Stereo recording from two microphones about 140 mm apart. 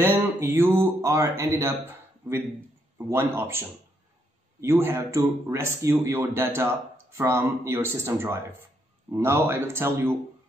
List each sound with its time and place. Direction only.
0.0 s speech: 15° right (ahead or behind)